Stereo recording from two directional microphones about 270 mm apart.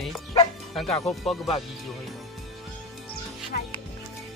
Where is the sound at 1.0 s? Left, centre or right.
Centre.